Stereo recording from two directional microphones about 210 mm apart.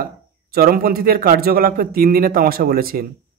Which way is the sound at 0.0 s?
45° right (ahead or behind).